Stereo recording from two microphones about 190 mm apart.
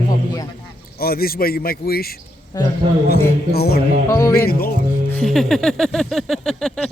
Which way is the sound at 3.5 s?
55° left (ahead or behind).